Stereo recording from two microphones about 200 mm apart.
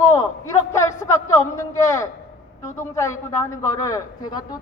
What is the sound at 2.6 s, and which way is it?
A man's voice, 15° left (ahead or behind).